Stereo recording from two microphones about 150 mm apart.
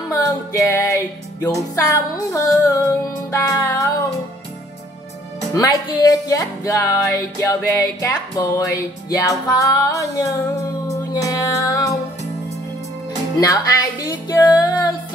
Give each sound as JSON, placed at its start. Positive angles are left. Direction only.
{"t": 0.1, "sound": "music", "side_deg": 20}
{"t": 5.5, "sound": "music", "side_deg": 25}
{"t": 13.4, "sound": "music", "side_deg": 25}